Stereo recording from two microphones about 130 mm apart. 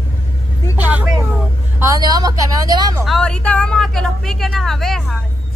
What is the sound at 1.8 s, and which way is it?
A woman's voice, 25° right (ahead or behind).